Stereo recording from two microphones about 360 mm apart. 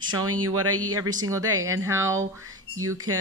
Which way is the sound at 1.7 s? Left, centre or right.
Centre.